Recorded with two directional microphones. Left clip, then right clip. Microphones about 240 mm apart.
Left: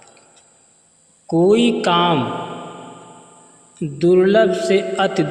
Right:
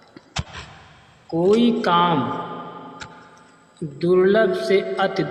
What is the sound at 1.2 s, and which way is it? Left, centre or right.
Speech, left.